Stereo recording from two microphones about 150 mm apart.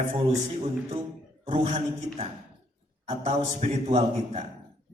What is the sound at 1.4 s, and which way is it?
Speech, 55° right (ahead or behind).